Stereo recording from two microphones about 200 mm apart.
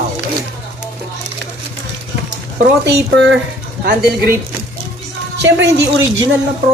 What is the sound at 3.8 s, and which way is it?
Speech, 50° right (ahead or behind).